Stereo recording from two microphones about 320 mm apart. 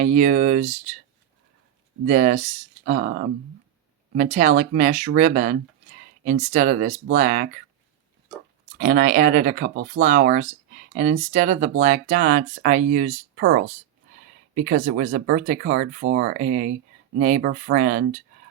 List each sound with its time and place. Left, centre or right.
0.0 s speech: right
2.0 s speech: right
8.8 s speech: right